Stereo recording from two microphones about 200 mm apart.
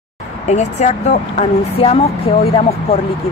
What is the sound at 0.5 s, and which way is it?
Speech, 35° left (ahead or behind).